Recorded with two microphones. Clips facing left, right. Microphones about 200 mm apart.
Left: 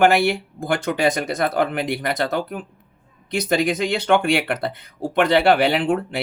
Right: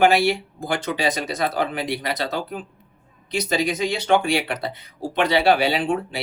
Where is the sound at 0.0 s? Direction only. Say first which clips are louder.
Left 1 dB; 55° left (ahead or behind).